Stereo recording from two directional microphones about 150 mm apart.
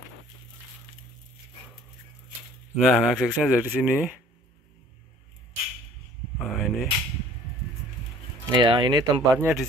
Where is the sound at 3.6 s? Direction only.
10° right (ahead or behind).